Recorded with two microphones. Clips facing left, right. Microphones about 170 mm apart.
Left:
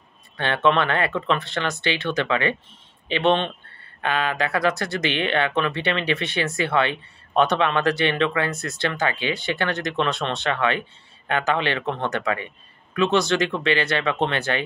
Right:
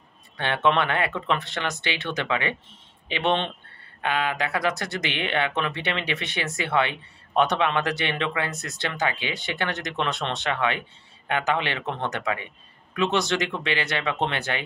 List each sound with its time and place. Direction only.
0.4 s speech: 15° right (ahead or behind)